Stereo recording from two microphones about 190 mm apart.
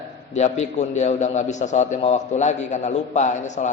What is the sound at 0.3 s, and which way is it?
A man's voice, 35° left (ahead or behind).